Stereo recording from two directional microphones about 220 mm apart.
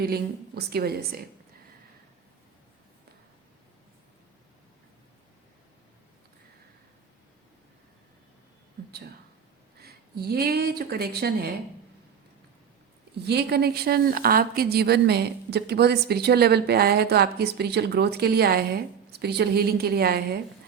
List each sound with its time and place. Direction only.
0.0 s a woman's voice: 45° right (ahead or behind)
9.8 s a woman's voice: 45° right (ahead or behind)
13.2 s a woman's voice: 50° right (ahead or behind)